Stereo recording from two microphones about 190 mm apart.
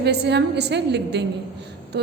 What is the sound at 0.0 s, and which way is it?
A woman's voice, 60° right (ahead or behind).